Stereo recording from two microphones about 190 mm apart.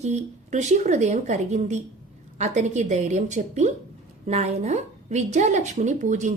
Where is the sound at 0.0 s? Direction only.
35° right (ahead or behind).